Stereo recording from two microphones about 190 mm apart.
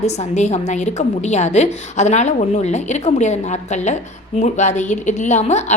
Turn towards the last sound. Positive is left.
turn(degrees=35)  # may be behind; listen again after turning